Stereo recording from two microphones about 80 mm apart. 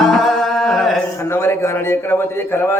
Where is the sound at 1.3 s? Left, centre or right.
Left.